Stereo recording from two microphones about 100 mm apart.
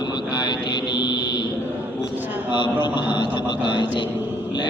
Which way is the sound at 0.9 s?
50° left (ahead or behind).